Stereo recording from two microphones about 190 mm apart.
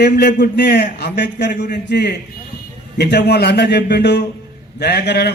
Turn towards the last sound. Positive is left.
turn(degrees=60)  # may be behind; listen again after turning